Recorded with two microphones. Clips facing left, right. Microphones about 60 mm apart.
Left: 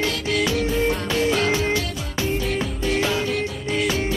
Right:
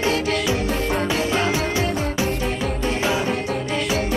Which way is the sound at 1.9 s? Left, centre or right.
Right.